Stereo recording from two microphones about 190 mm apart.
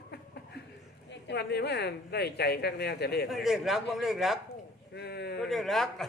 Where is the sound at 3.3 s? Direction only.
Centre (ahead or behind).